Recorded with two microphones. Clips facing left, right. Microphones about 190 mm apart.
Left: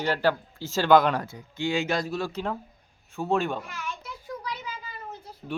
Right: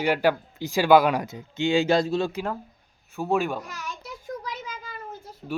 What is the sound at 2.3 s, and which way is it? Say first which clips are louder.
A man's voice: right 1 dB; 5° right (ahead or behind).